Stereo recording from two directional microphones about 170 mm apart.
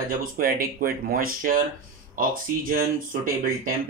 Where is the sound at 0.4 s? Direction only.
60° right (ahead or behind).